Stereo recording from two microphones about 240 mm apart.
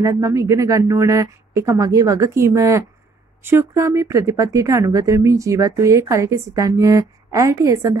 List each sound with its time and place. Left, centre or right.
0.0 s speech: centre